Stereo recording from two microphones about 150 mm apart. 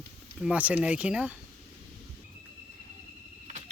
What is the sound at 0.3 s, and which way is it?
Speech, 5° right (ahead or behind).